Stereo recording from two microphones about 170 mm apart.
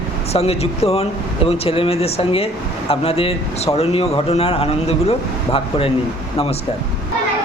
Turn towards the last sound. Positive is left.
turn(degrees=35)  # may be behind; listen again after turning